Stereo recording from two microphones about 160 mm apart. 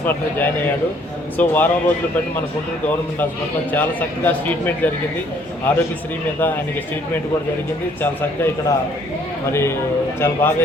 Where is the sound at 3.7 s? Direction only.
10° left (ahead or behind).